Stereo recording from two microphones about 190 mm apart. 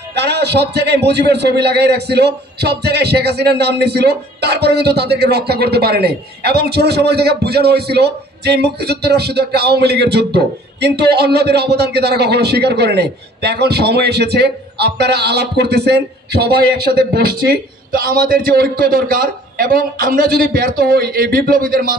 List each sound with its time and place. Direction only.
0.1 s a man's voice: 60° right (ahead or behind)